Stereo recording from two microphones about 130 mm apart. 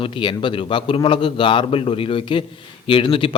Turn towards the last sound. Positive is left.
turn(degrees=40)  # may be behind; listen again after turning